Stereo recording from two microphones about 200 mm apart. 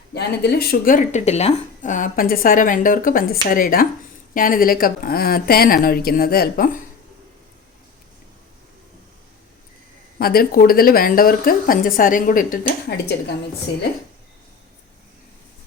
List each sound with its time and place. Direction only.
0.1 s speech: 55° left (ahead or behind)
10.2 s speech: 50° left (ahead or behind)